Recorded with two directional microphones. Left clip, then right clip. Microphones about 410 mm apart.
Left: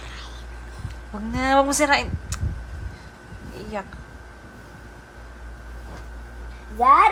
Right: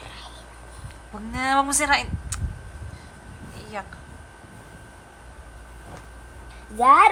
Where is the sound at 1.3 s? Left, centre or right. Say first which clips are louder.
Left 3 dB; centre.